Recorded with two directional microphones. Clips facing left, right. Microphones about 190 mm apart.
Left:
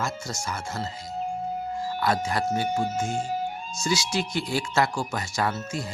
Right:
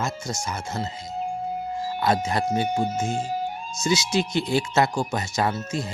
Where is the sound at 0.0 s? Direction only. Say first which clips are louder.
Right 2 dB; 20° right (ahead or behind).